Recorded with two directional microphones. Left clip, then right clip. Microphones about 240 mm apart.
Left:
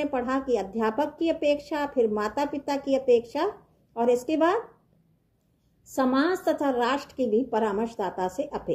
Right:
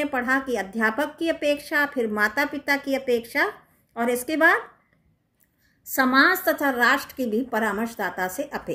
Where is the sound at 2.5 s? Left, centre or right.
Right.